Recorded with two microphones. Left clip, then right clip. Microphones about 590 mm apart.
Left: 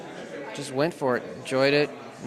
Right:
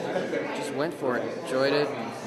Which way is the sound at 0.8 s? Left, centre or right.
Left.